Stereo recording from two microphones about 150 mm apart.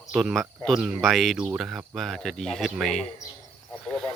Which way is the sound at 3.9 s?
5° left (ahead or behind).